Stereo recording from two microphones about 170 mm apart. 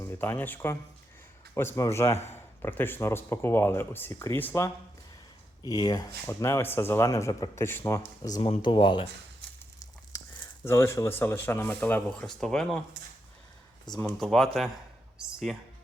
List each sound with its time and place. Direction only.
0.0 s speech: 10° left (ahead or behind)
8.4 s speech: 30° left (ahead or behind)
10.6 s speech: 15° left (ahead or behind)
14.2 s speech: centre (ahead or behind)